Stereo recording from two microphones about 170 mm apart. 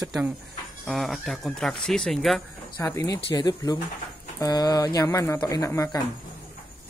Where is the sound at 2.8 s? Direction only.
15° left (ahead or behind).